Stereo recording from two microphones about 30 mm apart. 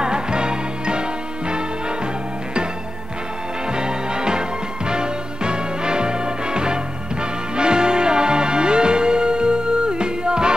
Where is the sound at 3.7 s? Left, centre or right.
Right.